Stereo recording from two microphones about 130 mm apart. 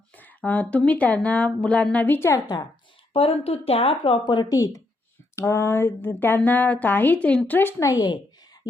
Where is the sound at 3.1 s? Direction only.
45° left (ahead or behind).